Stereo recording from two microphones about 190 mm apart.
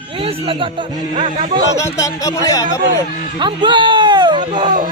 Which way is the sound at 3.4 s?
25° right (ahead or behind).